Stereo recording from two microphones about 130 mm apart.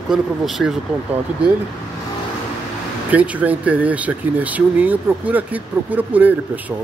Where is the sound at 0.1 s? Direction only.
5° right (ahead or behind).